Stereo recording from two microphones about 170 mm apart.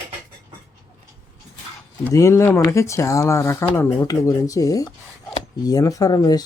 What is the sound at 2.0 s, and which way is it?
Speech, 15° left (ahead or behind).